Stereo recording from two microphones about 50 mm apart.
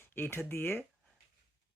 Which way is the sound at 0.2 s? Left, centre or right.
Left.